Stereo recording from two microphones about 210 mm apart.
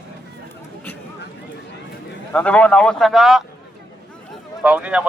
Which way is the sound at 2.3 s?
5° left (ahead or behind).